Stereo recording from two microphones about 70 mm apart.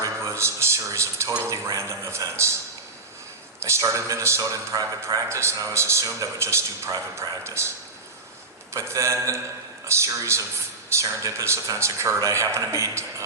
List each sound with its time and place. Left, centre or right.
0.2 s a sound: right
3.6 s a man's voice: right
8.7 s a man's voice: right